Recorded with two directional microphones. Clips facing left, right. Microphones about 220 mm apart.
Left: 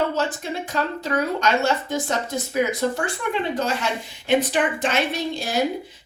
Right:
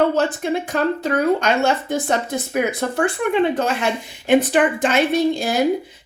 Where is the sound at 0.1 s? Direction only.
55° right (ahead or behind).